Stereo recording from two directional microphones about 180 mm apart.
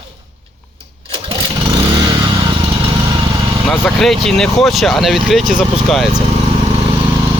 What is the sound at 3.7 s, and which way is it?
Speech, centre (ahead or behind).